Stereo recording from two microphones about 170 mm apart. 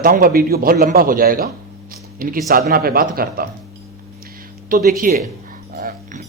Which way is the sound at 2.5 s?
60° right (ahead or behind).